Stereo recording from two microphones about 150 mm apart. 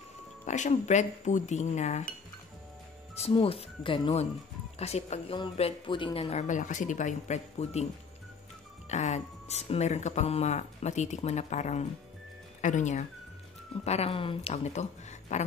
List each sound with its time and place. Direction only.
0.5 s speech: 50° left (ahead or behind)
3.2 s speech: 40° left (ahead or behind)
6.3 s speech: 55° left (ahead or behind)
8.8 s speech: 50° left (ahead or behind)
13.8 s speech: 45° left (ahead or behind)